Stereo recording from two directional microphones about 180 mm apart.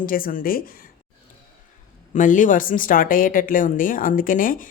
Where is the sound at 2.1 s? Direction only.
45° left (ahead or behind).